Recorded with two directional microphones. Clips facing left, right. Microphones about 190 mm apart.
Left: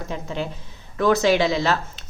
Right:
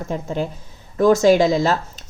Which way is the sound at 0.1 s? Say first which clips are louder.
Right 5 dB; 50° right (ahead or behind).